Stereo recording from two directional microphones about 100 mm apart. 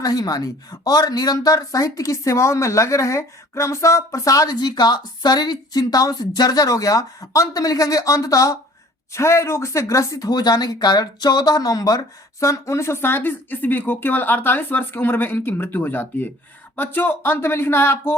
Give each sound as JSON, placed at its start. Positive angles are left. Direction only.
{"t": 0.0, "sound": "speech", "side_deg": 40}